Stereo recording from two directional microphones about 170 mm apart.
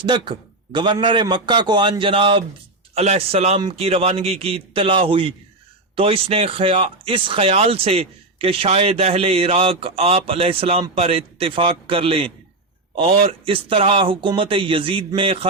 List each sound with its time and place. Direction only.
0.0 s a man's voice: 30° right (ahead or behind)